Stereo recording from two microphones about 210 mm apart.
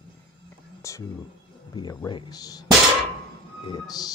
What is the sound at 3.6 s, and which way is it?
Speech, 20° left (ahead or behind).